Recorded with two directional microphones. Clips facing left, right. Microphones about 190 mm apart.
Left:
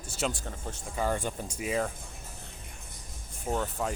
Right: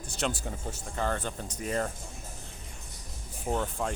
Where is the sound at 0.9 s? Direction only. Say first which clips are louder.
Left 2 dB; 10° left (ahead or behind).